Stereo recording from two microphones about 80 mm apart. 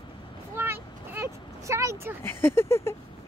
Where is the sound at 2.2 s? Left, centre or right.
Left.